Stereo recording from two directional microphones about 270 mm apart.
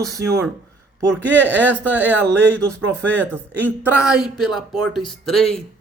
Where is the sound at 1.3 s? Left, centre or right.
Centre.